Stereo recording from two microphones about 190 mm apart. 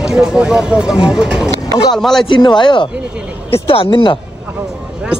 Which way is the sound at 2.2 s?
25° left (ahead or behind).